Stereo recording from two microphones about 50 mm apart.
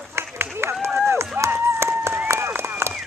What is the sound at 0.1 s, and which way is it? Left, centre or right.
Run, right.